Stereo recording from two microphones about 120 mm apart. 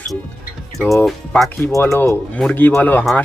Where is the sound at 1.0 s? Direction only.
Centre (ahead or behind).